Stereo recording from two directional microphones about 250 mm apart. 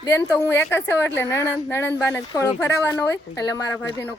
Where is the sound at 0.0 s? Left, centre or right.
Centre.